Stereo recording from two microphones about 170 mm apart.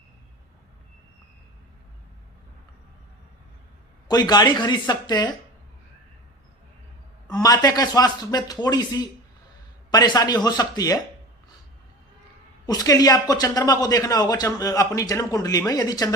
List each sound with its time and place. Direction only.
4.1 s a man's voice: 25° left (ahead or behind)
7.3 s a man's voice: 20° left (ahead or behind)
12.6 s a man's voice: 20° left (ahead or behind)